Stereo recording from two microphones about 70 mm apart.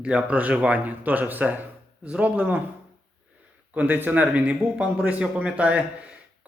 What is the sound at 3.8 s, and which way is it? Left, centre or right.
Speech, right.